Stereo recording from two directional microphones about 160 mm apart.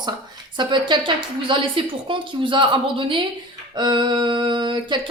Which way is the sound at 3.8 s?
30° right (ahead or behind).